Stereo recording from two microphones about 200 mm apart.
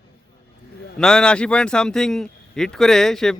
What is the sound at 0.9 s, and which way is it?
A man's voice, 5° left (ahead or behind).